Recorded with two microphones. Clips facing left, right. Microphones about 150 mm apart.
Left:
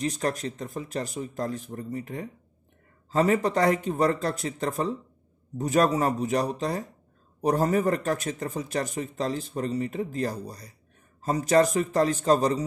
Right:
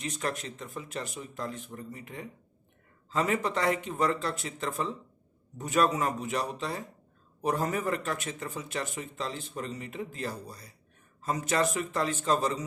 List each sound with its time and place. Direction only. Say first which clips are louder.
0.0 s speech: left 6 dB; 35° left (ahead or behind)